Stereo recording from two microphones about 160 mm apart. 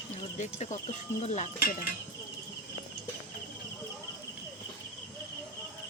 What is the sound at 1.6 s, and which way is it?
Speech, 65° left (ahead or behind).